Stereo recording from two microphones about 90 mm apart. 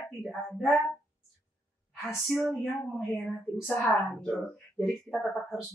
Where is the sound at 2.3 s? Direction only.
Centre (ahead or behind).